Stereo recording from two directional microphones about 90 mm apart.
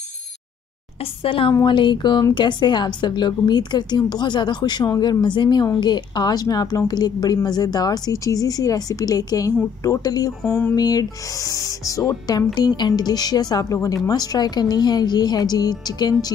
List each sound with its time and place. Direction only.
1.2 s a woman's voice: 80° left
1.5 s a woman's voice: 55° left (ahead or behind)
12.5 s a woman's voice: 55° left (ahead or behind)